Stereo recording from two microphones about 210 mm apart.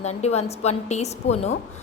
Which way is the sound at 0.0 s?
30° left (ahead or behind).